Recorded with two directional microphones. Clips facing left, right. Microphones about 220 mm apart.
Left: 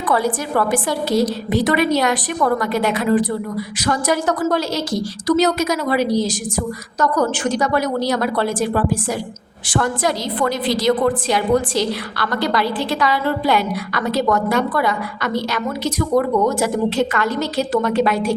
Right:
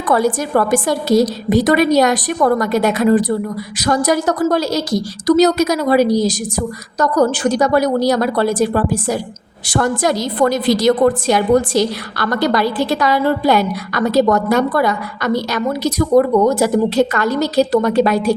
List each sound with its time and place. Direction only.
0.1 s a woman's voice: 45° right (ahead or behind)